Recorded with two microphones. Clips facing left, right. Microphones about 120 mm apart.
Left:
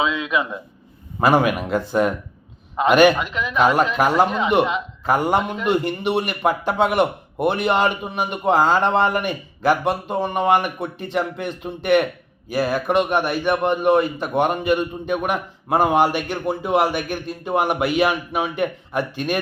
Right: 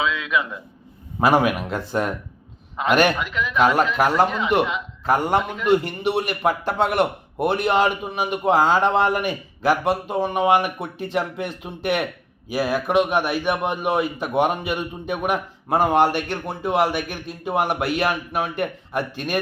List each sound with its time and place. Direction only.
0.0 s a man's voice: 20° left (ahead or behind)
1.2 s a man's voice: 5° right (ahead or behind)
3.2 s speech: 20° left (ahead or behind)
4.0 s a man's voice: centre (ahead or behind)
5.4 s speech: 20° left (ahead or behind)
5.6 s a man's voice: centre (ahead or behind)